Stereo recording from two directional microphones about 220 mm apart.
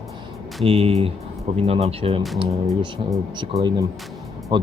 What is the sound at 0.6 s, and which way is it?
Speech, 25° right (ahead or behind).